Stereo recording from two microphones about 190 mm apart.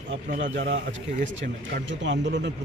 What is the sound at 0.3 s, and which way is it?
Speech, 40° right (ahead or behind).